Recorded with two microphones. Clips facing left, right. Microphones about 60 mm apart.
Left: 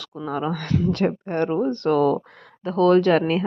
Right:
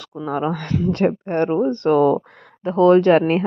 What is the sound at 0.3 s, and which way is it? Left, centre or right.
Speech, right.